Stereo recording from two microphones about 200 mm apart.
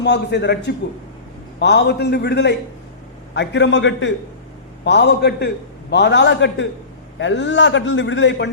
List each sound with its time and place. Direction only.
0.0 s a man's voice: 60° left (ahead or behind)